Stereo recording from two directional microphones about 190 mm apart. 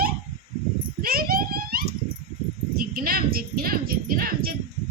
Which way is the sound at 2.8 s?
50° right (ahead or behind).